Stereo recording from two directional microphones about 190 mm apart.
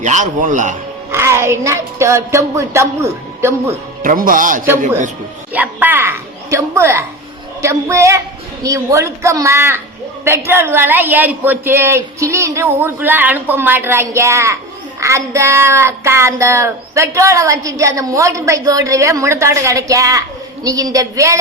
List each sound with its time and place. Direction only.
0.0 s a man's voice: 40° right (ahead or behind)
1.1 s child singing: 15° right (ahead or behind)
4.0 s speech: 45° right (ahead or behind)
5.5 s a sound: 10° right (ahead or behind)
7.6 s child singing: 15° right (ahead or behind)